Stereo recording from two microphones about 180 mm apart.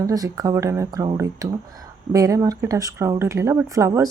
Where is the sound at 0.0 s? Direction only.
20° right (ahead or behind).